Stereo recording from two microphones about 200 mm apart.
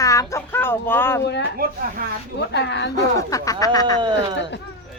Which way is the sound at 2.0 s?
45° right (ahead or behind).